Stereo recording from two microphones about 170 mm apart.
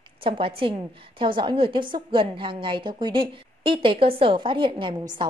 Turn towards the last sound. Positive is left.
turn(degrees=-30)  # may be behind; listen again after turning